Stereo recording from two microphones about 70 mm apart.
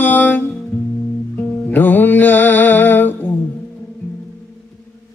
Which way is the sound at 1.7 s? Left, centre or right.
Left.